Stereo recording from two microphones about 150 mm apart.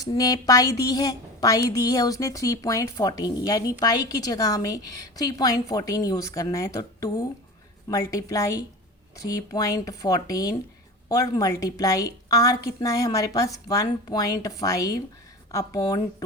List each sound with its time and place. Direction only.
0.0 s a woman's voice: 25° left (ahead or behind)